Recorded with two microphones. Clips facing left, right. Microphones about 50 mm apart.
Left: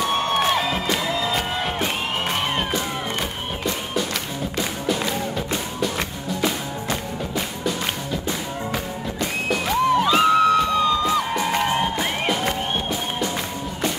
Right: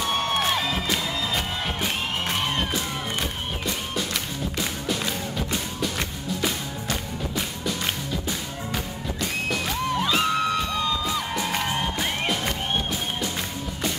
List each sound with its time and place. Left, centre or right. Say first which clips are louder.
0.1 s music: left 2 dB; centre
4.6 s music: left 5 dB; centre